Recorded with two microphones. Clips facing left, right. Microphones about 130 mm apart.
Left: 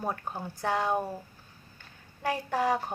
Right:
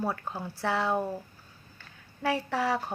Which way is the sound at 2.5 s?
15° left (ahead or behind).